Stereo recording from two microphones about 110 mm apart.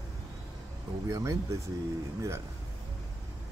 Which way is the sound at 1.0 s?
30° right (ahead or behind).